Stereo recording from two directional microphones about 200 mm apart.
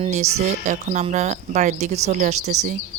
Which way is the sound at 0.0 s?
35° right (ahead or behind).